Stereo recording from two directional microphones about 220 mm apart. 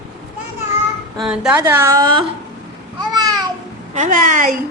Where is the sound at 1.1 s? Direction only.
Centre (ahead or behind).